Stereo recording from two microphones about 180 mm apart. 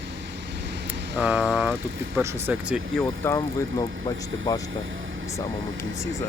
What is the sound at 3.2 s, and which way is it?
Speech, 10° left (ahead or behind).